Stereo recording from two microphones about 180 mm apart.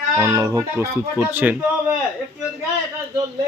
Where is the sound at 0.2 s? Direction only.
15° right (ahead or behind).